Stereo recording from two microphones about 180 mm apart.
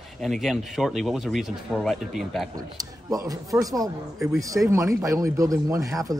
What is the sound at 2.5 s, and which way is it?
A man's voice, 20° right (ahead or behind).